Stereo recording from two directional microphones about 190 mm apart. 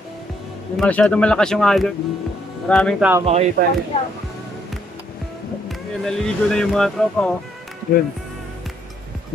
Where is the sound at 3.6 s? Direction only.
50° right (ahead or behind).